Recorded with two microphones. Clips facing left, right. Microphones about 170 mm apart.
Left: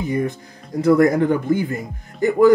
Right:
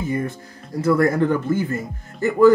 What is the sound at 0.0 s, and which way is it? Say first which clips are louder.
Speech: left 2 dB; 15° left (ahead or behind).